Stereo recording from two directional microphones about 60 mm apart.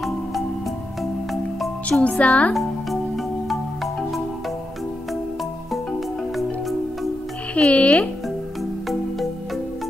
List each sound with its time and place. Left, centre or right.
1.9 s speech: left
3.4 s music: centre
7.5 s music: left